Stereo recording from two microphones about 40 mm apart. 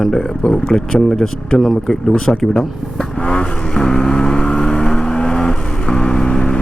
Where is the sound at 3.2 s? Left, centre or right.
Left.